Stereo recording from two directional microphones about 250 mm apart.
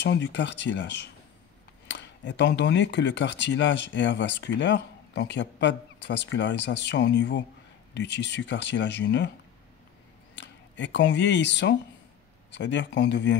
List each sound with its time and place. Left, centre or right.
0.0 s speech: left
10.3 s speech: left